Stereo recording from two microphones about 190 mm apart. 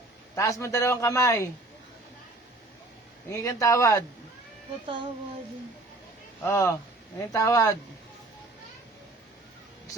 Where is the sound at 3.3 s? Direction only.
10° left (ahead or behind).